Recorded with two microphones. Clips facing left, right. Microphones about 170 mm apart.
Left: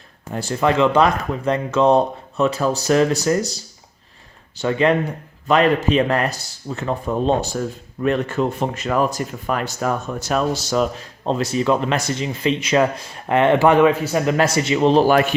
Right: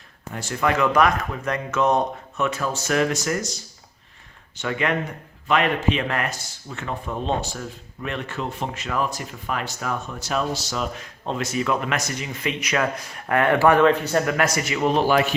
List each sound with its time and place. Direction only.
0.3 s speech: 30° left (ahead or behind); by 10.8 s 45° left (ahead or behind)
10.9 s speech: 35° left (ahead or behind)
14.0 s speech: 5° left (ahead or behind)
14.3 s speech: 30° left (ahead or behind)
15.0 s speech: 50° left (ahead or behind)